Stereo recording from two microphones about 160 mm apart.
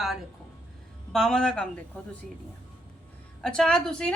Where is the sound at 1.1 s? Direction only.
5° left (ahead or behind).